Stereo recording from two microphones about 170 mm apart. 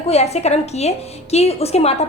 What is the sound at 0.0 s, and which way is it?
A woman's voice, 40° left (ahead or behind).